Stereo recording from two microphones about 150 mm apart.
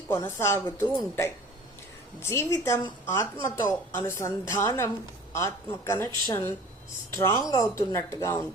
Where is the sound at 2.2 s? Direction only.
20° left (ahead or behind).